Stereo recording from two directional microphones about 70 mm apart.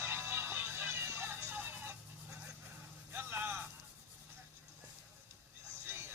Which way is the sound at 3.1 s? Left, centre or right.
Right.